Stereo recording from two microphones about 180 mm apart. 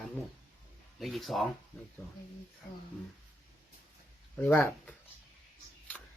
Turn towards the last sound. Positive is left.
turn(degrees=10)  # may be behind; listen again after turning